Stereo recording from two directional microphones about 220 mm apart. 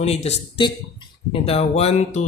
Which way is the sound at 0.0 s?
30° left (ahead or behind).